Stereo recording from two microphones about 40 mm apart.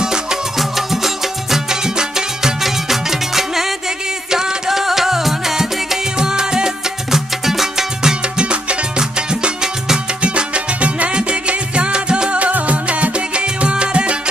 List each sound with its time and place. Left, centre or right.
0.0 s music: centre
0.6 s music: centre
10.2 s music: right